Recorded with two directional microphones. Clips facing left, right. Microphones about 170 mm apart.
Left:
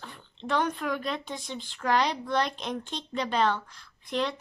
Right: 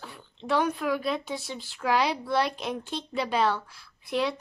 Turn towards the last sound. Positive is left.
turn(degrees=-10)  # may be behind; listen again after turning